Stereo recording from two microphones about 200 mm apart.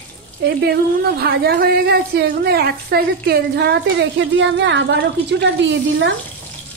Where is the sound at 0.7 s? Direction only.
50° right (ahead or behind).